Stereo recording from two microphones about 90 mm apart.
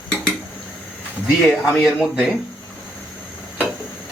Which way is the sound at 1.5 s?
5° right (ahead or behind).